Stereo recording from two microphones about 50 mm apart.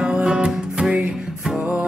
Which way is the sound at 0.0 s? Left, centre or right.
Centre.